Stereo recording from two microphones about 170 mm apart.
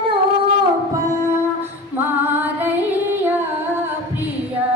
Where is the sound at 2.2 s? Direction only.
10° right (ahead or behind).